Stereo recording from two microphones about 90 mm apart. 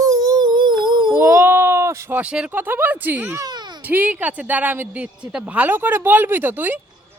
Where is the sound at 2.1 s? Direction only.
15° right (ahead or behind).